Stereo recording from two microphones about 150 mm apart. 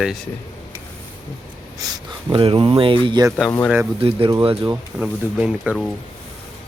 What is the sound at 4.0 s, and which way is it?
Speech, 40° right (ahead or behind).